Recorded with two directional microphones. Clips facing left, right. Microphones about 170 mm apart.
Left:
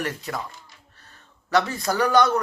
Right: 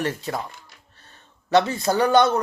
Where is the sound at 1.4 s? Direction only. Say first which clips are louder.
Right 3 dB; 25° right (ahead or behind).